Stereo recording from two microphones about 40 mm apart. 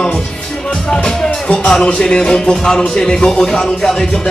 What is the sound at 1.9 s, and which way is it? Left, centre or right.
Speech, left.